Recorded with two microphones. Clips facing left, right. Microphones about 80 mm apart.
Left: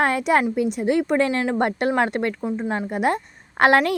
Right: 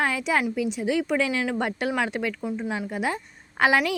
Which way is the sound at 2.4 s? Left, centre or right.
Left.